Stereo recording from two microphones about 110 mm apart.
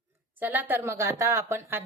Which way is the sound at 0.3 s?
15° right (ahead or behind).